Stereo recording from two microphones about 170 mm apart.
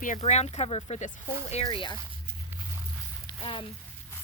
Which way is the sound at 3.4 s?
30° left (ahead or behind).